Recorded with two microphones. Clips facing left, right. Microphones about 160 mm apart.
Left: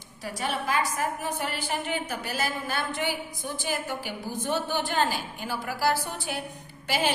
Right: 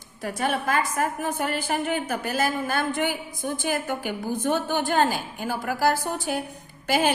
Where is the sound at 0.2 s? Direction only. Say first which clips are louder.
Right 5 dB; 50° right (ahead or behind).